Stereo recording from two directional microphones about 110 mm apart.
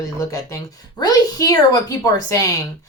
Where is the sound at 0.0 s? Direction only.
30° left (ahead or behind).